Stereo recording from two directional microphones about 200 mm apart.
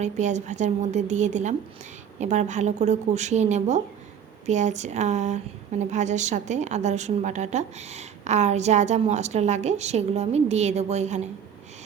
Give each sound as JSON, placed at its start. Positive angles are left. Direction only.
{"t": 0.0, "sound": "a woman's voice", "side_deg": -35}